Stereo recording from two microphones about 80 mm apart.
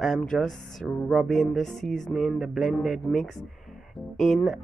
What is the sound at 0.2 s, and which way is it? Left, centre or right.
Speech, centre.